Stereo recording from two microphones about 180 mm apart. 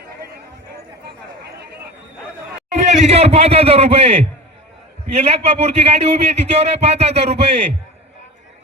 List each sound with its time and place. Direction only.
2.7 s a man's voice: 35° right (ahead or behind)